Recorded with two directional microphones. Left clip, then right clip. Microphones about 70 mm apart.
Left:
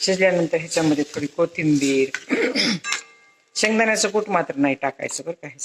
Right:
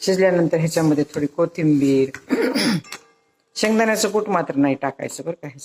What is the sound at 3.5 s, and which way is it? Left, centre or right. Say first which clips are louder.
Speech: even; right.